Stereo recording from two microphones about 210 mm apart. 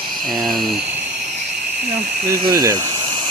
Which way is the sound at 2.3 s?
15° right (ahead or behind).